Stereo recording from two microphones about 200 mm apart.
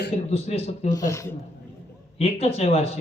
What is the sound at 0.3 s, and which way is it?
Speech, 30° left (ahead or behind).